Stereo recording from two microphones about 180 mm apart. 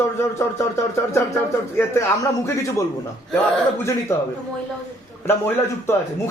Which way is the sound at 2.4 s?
15° left (ahead or behind).